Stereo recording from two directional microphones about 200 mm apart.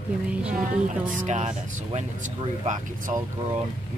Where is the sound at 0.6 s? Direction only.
40° right (ahead or behind).